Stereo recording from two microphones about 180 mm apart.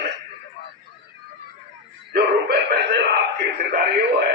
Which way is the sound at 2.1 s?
60° right (ahead or behind).